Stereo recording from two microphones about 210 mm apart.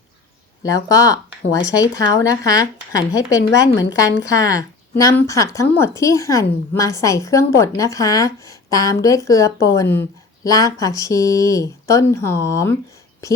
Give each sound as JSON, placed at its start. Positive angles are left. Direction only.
{"t": 0.6, "sound": "a woman's voice", "side_deg": 15}